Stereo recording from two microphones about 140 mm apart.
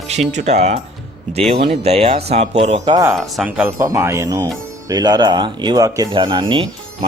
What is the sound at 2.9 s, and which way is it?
Speech, 20° right (ahead or behind).